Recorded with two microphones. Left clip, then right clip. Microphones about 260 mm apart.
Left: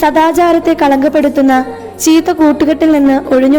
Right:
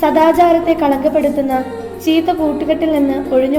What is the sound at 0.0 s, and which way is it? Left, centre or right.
Speech, left.